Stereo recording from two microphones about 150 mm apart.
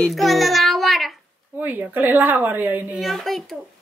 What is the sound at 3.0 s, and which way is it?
Speech, centre (ahead or behind).